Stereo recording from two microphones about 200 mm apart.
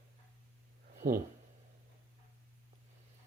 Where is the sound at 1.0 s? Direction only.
45° right (ahead or behind).